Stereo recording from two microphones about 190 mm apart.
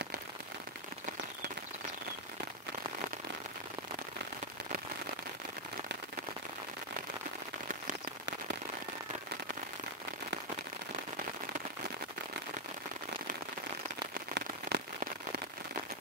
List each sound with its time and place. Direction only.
14.1 s rain on surface: 60° right (ahead or behind)